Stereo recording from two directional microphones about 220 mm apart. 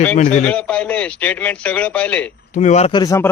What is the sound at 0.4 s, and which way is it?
A man's voice, 5° left (ahead or behind).